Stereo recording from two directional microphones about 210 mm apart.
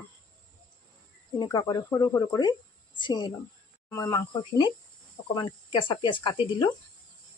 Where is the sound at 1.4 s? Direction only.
15° left (ahead or behind).